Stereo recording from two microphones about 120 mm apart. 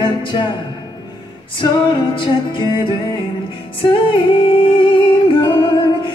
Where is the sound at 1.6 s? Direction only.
40° left (ahead or behind).